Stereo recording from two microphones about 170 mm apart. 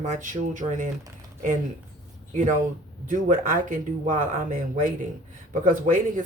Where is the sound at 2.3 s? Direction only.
45° right (ahead or behind).